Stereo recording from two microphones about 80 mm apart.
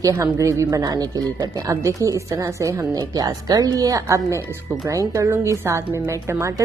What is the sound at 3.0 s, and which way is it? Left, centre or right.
Speech, right.